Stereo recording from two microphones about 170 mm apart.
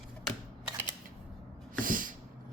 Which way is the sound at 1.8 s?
55° right (ahead or behind).